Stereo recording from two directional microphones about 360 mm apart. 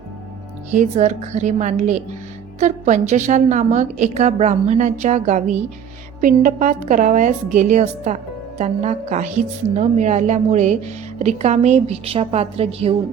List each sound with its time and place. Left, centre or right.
0.7 s a woman's voice: centre